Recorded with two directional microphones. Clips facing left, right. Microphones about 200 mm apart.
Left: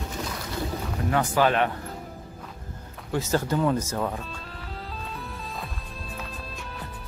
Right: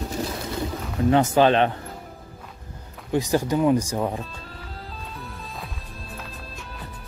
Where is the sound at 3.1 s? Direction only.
15° right (ahead or behind).